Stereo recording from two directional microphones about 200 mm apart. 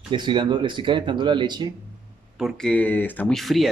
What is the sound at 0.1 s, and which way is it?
Speech, 25° right (ahead or behind).